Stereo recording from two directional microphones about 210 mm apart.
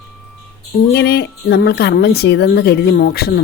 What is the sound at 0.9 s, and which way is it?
Speech, 50° left (ahead or behind).